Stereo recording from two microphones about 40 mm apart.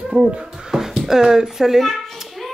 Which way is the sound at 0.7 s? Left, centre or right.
Centre.